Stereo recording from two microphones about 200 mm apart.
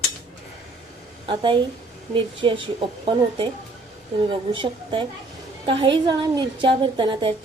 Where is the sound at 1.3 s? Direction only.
25° right (ahead or behind).